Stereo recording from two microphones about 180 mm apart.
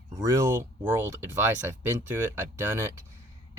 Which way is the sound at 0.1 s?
20° right (ahead or behind).